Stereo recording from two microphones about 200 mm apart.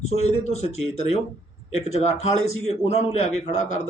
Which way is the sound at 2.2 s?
90° left.